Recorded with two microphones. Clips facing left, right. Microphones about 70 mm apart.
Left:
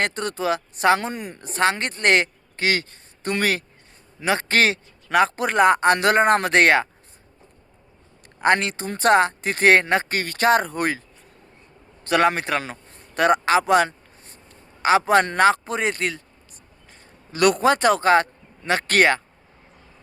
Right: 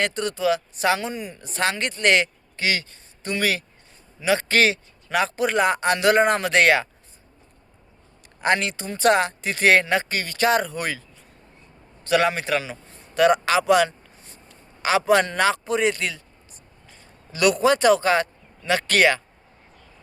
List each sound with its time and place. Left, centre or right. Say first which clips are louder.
0.0 s speech: right 1 dB; left
8.4 s speech: left 2 dB; left
12.0 s a man's voice: left 1 dB; left